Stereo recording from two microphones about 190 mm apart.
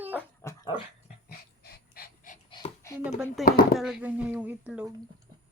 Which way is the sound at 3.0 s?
5° right (ahead or behind).